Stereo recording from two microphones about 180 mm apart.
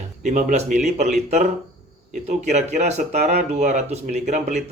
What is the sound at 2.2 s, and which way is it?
Speech, 40° right (ahead or behind).